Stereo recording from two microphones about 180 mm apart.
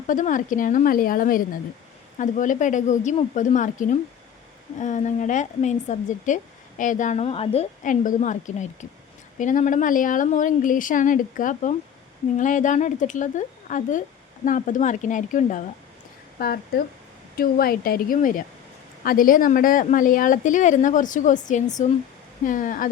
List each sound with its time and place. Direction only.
0.1 s speech: 45° left (ahead or behind)
16.4 s speech: 55° left (ahead or behind)